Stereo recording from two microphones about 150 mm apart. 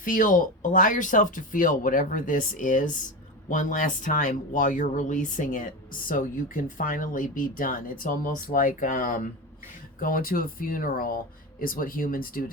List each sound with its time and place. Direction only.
0.0 s speech: 65° left (ahead or behind)
10.0 s speech: 75° left (ahead or behind)